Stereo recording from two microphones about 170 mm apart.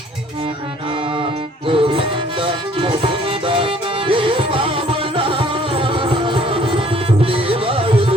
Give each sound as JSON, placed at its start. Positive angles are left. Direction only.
{"t": 1.2, "sound": "music", "side_deg": -30}